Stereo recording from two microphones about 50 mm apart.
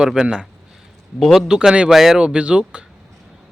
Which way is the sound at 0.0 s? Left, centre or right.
Centre.